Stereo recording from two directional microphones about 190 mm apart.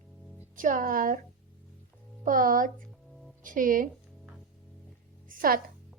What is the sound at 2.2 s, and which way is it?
Music, 45° right (ahead or behind).